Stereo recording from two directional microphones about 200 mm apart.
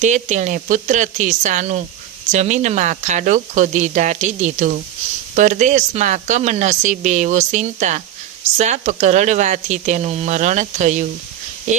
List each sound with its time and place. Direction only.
0.0 s speech: 35° right (ahead or behind)